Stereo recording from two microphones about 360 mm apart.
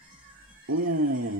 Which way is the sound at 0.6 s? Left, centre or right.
Right.